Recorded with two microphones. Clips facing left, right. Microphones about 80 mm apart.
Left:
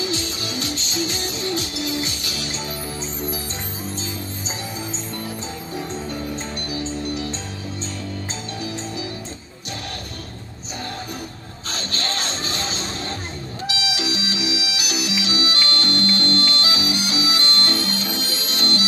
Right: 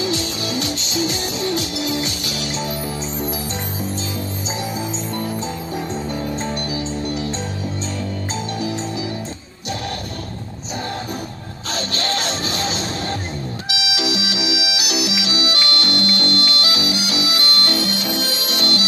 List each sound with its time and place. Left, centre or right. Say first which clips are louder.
0.1 s music: right 4 dB; left
11.7 s music: right 5 dB; left
18.0 s music: right 4 dB; right
18.6 s music: right 1 dB; left